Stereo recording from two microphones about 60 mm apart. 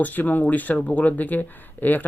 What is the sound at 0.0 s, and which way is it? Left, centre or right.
Speech, left.